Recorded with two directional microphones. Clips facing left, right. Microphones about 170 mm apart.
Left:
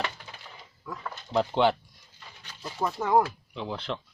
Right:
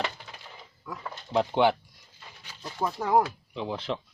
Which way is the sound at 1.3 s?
5° right (ahead or behind).